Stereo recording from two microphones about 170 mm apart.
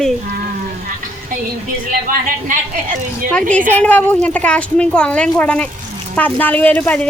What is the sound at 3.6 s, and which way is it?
Speech, 10° left (ahead or behind).